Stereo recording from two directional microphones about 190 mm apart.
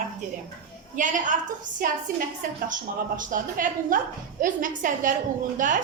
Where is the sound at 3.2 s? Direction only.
45° right (ahead or behind).